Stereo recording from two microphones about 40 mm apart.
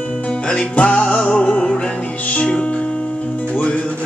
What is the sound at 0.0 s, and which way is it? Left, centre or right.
Music, left.